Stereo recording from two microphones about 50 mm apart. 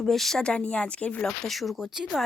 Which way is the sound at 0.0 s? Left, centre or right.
Centre.